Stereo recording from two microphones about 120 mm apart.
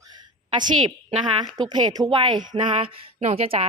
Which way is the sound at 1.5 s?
35° right (ahead or behind).